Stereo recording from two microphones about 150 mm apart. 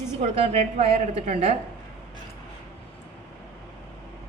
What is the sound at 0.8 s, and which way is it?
Speech, 45° right (ahead or behind).